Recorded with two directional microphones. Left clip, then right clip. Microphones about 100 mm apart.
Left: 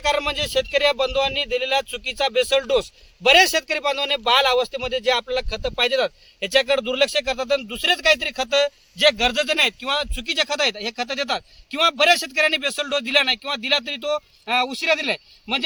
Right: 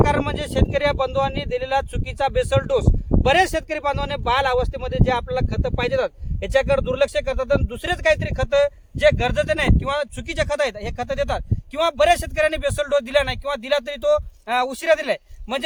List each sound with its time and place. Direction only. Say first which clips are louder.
0.1 s speech: left 1 dB; 40° right (ahead or behind)